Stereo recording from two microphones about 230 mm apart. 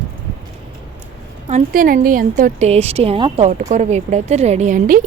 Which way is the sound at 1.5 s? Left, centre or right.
Right.